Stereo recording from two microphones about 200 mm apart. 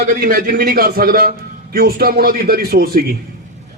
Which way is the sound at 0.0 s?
45° right (ahead or behind).